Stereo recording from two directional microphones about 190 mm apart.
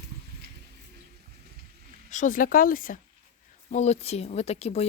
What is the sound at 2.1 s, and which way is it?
Speech, 40° left (ahead or behind).